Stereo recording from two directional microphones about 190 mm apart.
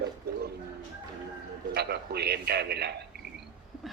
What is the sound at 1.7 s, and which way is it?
A man's voice, 60° right (ahead or behind).